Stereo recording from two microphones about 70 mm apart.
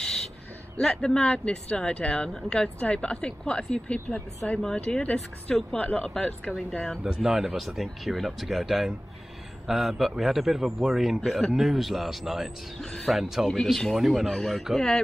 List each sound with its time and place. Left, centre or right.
0.0 s a sound: centre
0.7 s speech: centre
7.0 s speech: centre
12.8 s speech: centre
13.2 s speech: centre